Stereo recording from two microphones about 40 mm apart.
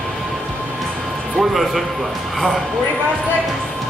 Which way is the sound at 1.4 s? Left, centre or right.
Centre.